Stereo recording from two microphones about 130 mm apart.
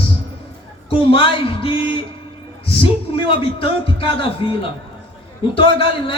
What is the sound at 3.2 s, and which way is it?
A man's voice, 45° left (ahead or behind).